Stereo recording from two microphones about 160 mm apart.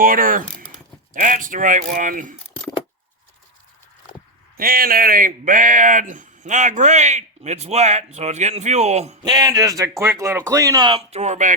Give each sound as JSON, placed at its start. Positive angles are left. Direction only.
{"t": 0.0, "sound": "speech", "side_deg": -60}
{"t": 4.5, "sound": "speech", "side_deg": -65}
{"t": 9.2, "sound": "speech", "side_deg": -25}
{"t": 11.1, "sound": "speech", "side_deg": -45}